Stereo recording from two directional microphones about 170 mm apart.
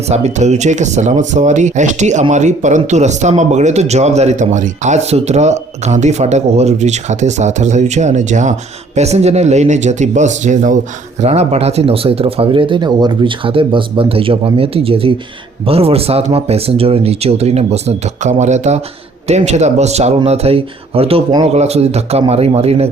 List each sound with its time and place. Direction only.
0.1 s speech: 40° right (ahead or behind)